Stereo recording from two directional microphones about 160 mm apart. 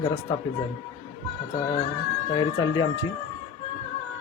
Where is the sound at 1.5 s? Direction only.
25° left (ahead or behind).